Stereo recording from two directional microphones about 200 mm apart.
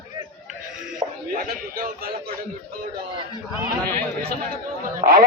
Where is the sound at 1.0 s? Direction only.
25° right (ahead or behind).